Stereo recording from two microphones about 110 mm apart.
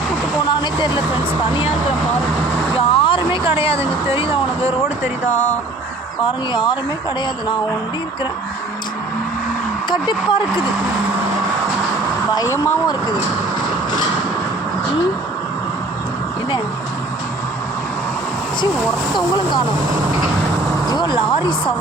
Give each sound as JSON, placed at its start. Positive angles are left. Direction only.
{"t": 0.5, "sound": "speech", "side_deg": 45}
{"t": 2.7, "sound": "speech", "side_deg": 55}
{"t": 5.3, "sound": "speech", "side_deg": 90}
{"t": 6.5, "sound": "speech", "side_deg": 45}
{"t": 9.9, "sound": "speech", "side_deg": 40}
{"t": 19.1, "sound": "speech", "side_deg": 45}